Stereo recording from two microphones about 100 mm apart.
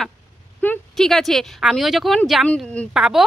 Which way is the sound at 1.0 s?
5° left (ahead or behind).